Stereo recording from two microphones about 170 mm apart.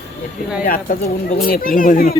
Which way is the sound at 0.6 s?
55° left (ahead or behind).